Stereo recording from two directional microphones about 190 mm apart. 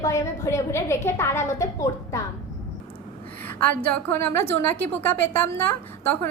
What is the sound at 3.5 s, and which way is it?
A woman's voice, 10° left (ahead or behind).